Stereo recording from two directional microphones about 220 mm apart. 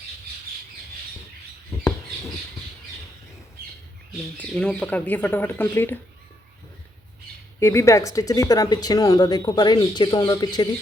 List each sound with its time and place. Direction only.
4.4 s speech: 5° left (ahead or behind)
7.6 s speech: 15° left (ahead or behind)